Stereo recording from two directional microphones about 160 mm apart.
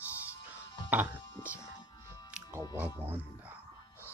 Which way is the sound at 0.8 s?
10° right (ahead or behind).